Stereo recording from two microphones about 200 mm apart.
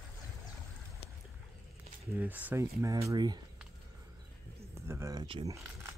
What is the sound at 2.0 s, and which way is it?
Speech, 10° right (ahead or behind).